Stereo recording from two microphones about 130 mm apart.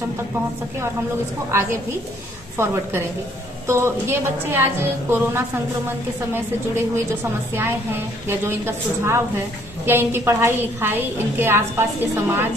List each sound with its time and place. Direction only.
1.5 s a woman's voice: 20° right (ahead or behind)
8.3 s a woman's voice: 20° right (ahead or behind)